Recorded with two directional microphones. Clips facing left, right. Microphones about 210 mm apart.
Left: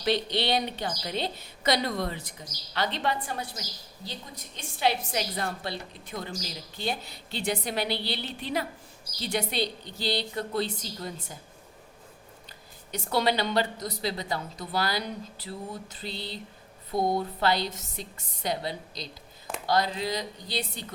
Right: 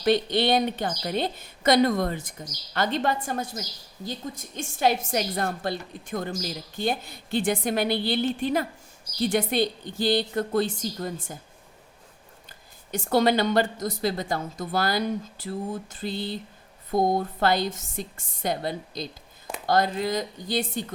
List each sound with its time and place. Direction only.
0.0 s a woman's voice: 50° right (ahead or behind)
12.9 s a woman's voice: 50° right (ahead or behind)